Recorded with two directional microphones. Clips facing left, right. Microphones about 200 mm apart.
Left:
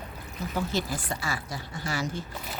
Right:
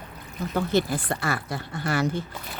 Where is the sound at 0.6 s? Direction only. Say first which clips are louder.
Right 6 dB; 60° right (ahead or behind).